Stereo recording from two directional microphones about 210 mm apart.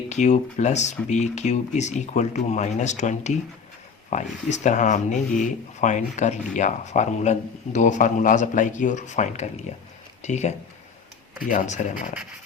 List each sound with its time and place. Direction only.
0.1 s speech: 35° left (ahead or behind)